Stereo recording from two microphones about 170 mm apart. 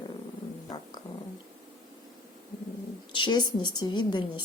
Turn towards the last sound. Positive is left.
turn(degrees=25)  # may be behind; listen again after turning